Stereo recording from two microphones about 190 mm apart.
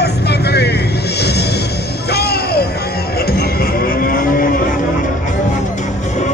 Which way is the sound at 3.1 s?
55° left (ahead or behind).